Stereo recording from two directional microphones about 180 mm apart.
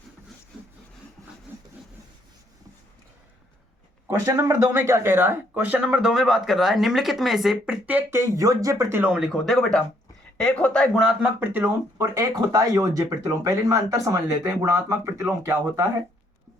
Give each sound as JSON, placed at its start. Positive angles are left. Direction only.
{"t": 1.5, "sound": "a sound", "side_deg": -10}
{"t": 4.1, "sound": "speech", "side_deg": -15}
{"t": 9.1, "sound": "speech", "side_deg": 0}